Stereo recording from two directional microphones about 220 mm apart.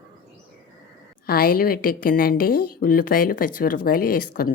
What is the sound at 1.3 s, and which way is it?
A woman's voice, 40° left (ahead or behind).